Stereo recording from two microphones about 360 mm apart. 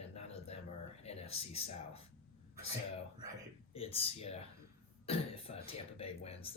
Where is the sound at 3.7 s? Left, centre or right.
Centre.